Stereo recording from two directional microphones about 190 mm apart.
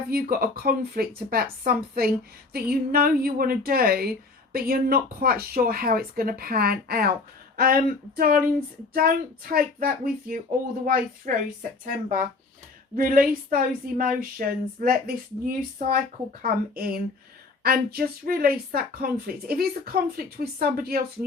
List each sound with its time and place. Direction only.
0.1 s speech: 50° right (ahead or behind)